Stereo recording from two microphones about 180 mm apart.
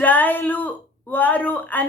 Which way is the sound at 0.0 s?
10° left (ahead or behind).